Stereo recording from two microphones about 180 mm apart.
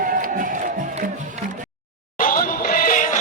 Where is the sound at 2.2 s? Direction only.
50° left (ahead or behind).